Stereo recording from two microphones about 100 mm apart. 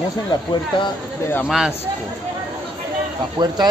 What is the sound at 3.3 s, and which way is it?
Speech, 45° right (ahead or behind).